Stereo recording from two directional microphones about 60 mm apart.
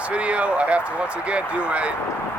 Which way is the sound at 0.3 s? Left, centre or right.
Centre.